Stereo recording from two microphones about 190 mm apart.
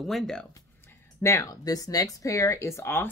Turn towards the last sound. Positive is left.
turn(degrees=15)  # may be behind; listen again after turning